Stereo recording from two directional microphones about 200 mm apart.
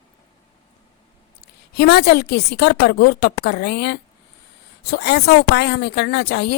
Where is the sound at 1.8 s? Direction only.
55° left (ahead or behind).